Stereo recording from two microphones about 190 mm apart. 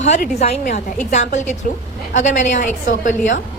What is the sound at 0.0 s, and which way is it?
A woman's voice, 35° left (ahead or behind).